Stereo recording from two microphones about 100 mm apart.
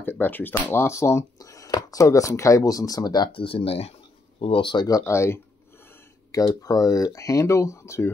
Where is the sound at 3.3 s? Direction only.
65° left (ahead or behind).